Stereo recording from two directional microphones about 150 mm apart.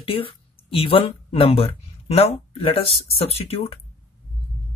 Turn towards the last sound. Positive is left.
turn(degrees=40)  # may be behind; listen again after turning